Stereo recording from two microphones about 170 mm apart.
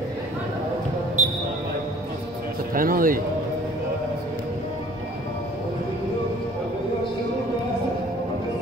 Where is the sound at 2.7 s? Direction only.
55° right (ahead or behind).